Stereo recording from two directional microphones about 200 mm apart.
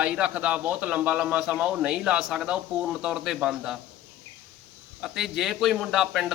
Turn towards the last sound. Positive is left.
turn(degrees=0)  # may be behind; listen again after turning